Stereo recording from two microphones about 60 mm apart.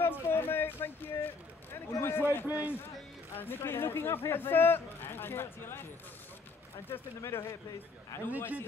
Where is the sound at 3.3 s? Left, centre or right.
Left.